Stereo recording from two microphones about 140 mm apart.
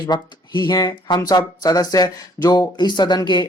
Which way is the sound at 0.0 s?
30° left (ahead or behind).